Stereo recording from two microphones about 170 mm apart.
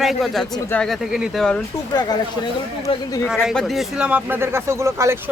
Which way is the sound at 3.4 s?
Centre (ahead or behind).